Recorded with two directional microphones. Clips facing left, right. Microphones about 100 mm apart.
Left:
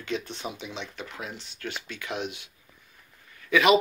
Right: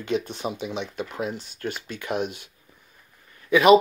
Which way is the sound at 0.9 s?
45° right (ahead or behind).